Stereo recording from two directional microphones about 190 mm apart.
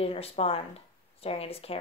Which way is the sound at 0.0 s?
30° left (ahead or behind).